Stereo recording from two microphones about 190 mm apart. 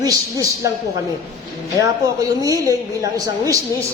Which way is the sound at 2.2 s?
20° right (ahead or behind).